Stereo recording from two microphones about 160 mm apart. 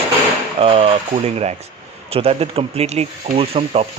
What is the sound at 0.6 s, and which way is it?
Speech, 35° right (ahead or behind).